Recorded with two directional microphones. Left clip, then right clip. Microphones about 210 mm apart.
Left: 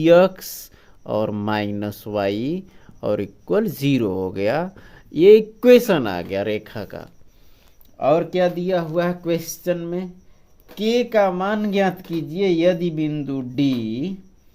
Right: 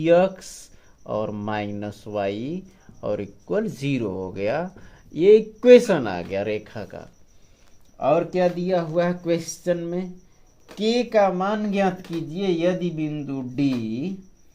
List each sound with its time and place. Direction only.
0.0 s speech: 45° left (ahead or behind)